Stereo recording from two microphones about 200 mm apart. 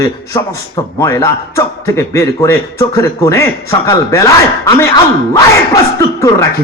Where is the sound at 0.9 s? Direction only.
15° left (ahead or behind).